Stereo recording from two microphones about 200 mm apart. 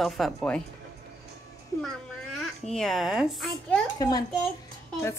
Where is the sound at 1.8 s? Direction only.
Centre (ahead or behind).